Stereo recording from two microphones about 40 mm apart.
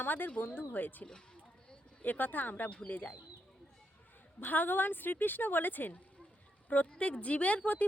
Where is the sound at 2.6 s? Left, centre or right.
Left.